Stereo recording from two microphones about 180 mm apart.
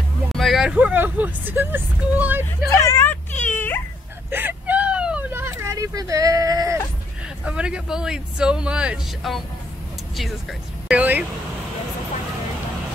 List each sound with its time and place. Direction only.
0.3 s speech: centre (ahead or behind)
2.7 s whimper: 15° left (ahead or behind)
4.3 s vehicle: 10° right (ahead or behind)
7.4 s speech: 5° right (ahead or behind)
10.9 s vehicle: 10° right (ahead or behind)